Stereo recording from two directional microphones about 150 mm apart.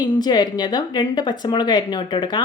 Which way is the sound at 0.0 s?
30° left (ahead or behind).